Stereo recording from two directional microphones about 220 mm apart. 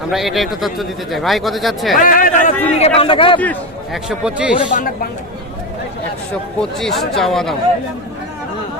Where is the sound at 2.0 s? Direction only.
40° left (ahead or behind).